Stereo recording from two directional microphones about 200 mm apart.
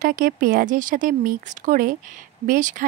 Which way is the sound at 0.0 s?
45° right (ahead or behind).